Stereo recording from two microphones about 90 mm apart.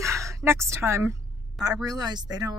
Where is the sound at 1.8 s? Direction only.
45° right (ahead or behind).